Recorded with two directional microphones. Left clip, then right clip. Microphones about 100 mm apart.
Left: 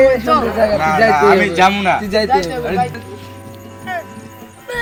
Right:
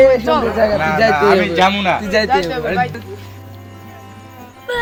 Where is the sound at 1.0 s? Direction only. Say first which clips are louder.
Left 2 dB; 40° right (ahead or behind).